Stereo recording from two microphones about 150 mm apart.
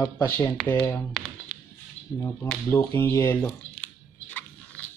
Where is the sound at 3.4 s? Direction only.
5° left (ahead or behind).